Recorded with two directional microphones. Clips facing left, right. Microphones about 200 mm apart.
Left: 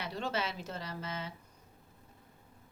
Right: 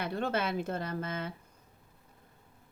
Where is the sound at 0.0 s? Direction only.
55° right (ahead or behind).